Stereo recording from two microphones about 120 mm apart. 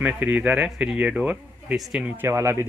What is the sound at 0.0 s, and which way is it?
Speech, 15° right (ahead or behind).